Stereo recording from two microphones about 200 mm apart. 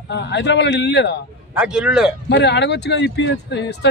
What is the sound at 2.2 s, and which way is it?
Speech, 60° left (ahead or behind).